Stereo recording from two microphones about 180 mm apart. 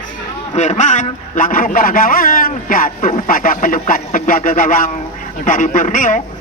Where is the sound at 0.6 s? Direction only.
40° left (ahead or behind).